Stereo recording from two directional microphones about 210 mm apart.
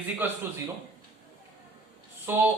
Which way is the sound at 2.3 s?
10° right (ahead or behind).